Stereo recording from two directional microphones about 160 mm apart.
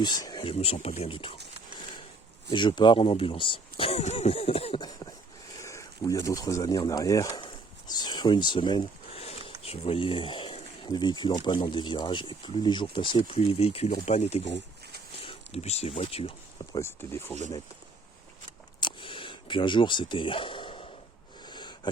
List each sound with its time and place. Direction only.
0.0 s speech: 25° left (ahead or behind)
2.5 s speech: 30° left (ahead or behind)
16.8 s speech: 15° left (ahead or behind)
18.8 s a sound: 30° left (ahead or behind)